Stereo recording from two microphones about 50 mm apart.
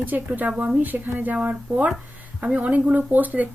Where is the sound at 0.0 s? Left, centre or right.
Right.